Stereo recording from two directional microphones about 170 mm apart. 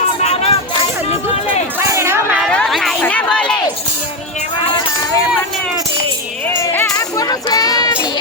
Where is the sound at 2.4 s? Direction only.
5° left (ahead or behind).